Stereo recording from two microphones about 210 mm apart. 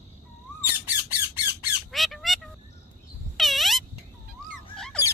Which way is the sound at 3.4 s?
Centre (ahead or behind).